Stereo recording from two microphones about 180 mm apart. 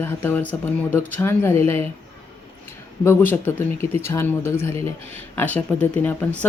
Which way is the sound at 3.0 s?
15° left (ahead or behind).